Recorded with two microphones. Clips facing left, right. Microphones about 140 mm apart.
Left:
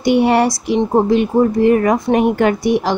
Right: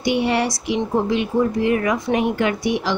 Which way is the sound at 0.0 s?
45° left (ahead or behind).